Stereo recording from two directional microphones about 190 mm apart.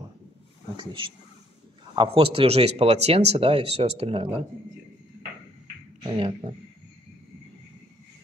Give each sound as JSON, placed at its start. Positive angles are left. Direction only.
{"t": 0.7, "sound": "speech", "side_deg": -25}
{"t": 6.0, "sound": "speech", "side_deg": -30}